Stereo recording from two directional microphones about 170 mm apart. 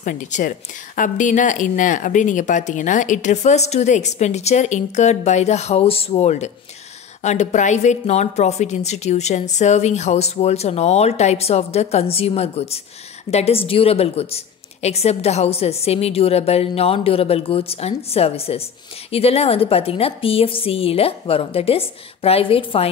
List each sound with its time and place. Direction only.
0.0 s a woman's voice: 50° left (ahead or behind); by 22.8 s 30° left (ahead or behind)